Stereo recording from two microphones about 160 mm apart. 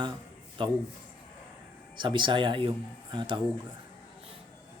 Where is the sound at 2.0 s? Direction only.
30° right (ahead or behind).